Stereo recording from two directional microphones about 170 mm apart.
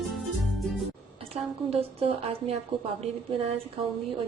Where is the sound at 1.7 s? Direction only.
35° right (ahead or behind).